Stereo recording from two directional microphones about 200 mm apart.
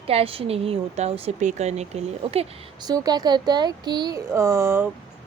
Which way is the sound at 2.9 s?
20° right (ahead or behind).